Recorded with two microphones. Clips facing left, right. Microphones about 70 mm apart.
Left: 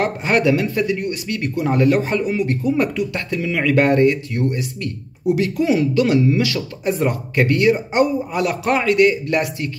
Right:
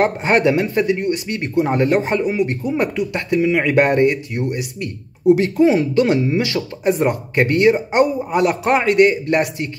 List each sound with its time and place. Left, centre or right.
0.0 s speech: right
5.2 s speech: right